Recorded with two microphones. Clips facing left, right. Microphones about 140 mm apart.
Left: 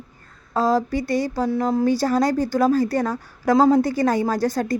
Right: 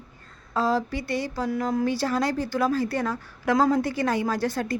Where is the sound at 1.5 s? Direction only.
30° left (ahead or behind).